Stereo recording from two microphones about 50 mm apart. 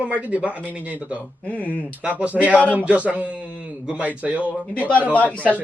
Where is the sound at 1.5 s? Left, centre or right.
Left.